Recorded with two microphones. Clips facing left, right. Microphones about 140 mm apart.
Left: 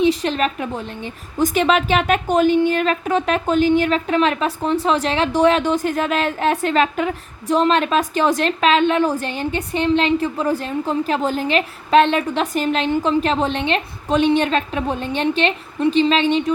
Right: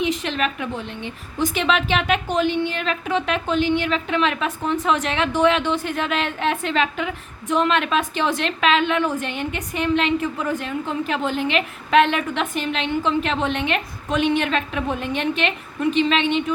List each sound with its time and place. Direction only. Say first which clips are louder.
0.0 s a woman's voice: left 5 dB; 35° left (ahead or behind)